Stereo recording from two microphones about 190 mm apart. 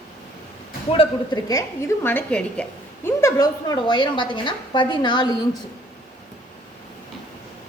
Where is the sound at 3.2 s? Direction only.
20° left (ahead or behind).